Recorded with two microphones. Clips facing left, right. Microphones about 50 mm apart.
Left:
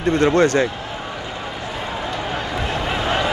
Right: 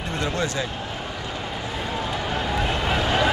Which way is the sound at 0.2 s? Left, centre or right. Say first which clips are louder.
Left 10 dB; left.